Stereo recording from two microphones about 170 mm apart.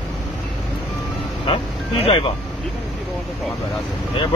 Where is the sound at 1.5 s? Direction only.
35° left (ahead or behind).